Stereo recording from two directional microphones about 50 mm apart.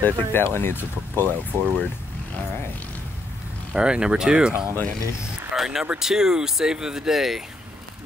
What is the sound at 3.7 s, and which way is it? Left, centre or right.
Speech, centre.